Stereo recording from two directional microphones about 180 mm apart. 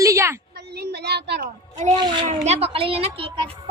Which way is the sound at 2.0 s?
25° right (ahead or behind).